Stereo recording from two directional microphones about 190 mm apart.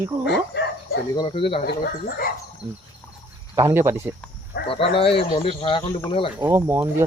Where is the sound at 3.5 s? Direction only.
20° right (ahead or behind).